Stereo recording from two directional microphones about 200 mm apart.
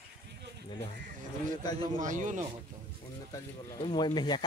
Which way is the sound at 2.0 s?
40° right (ahead or behind).